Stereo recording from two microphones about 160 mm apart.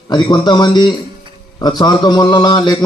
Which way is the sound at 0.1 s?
25° left (ahead or behind).